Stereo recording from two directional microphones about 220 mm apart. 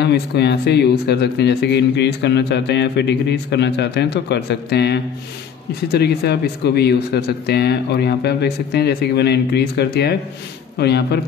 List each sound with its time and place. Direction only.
0.0 s speech: 50° left (ahead or behind)